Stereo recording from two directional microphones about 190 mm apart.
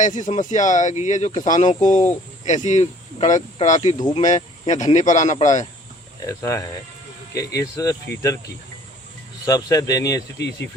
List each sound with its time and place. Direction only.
0.0 s speech: 40° left (ahead or behind)
6.2 s speech: 15° left (ahead or behind)
9.5 s speech: 20° left (ahead or behind)